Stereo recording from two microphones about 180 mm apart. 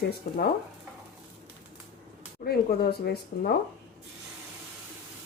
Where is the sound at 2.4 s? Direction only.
60° left (ahead or behind).